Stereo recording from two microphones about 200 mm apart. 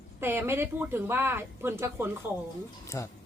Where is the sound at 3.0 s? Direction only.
15° left (ahead or behind).